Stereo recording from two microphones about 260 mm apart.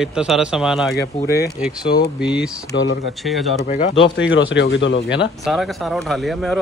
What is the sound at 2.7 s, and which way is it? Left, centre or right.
Speech, left.